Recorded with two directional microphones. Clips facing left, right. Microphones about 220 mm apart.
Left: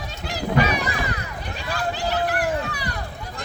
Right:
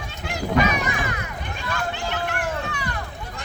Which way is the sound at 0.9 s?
35° left (ahead or behind).